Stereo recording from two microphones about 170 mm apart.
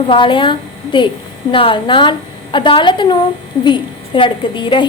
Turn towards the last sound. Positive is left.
turn(degrees=30)  # may be behind; listen again after turning